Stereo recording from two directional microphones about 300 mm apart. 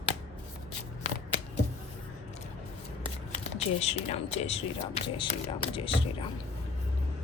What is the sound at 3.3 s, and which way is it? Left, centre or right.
Speech, left.